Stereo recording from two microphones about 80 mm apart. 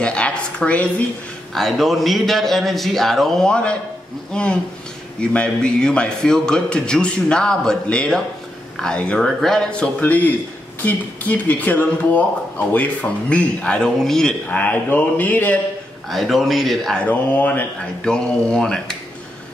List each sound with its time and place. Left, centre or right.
0.0 s a sound: centre
1.5 s a man's voice: centre
14.5 s speech: centre
16.1 s a man's voice: centre
16.9 s speech: centre
18.0 s a man's voice: centre